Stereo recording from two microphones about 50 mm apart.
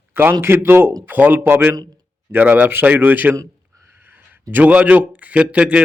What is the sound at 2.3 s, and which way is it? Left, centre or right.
A man's voice, right.